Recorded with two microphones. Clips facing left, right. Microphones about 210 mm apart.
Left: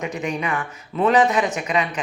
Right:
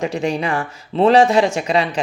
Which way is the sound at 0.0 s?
30° right (ahead or behind).